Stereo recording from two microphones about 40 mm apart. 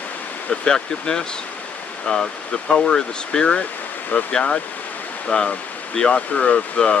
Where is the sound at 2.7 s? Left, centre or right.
Centre.